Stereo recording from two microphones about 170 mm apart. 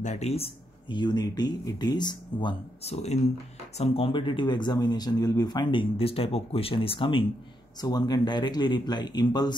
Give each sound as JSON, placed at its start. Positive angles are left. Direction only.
{"t": 0.0, "sound": "speech", "side_deg": 40}
{"t": 2.8, "sound": "speech", "side_deg": 40}